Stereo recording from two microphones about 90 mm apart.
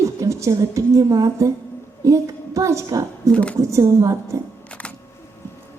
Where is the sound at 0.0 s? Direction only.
35° right (ahead or behind).